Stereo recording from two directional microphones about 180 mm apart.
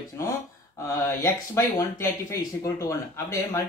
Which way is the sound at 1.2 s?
15° left (ahead or behind).